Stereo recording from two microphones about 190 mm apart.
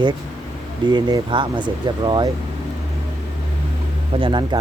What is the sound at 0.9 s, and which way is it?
Speech, 25° right (ahead or behind).